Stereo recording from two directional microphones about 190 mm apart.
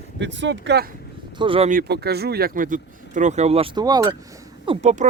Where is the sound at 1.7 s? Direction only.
55° right (ahead or behind); by 4.2 s 20° right (ahead or behind).